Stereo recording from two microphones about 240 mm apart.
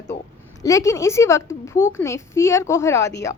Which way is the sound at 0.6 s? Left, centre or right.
Centre.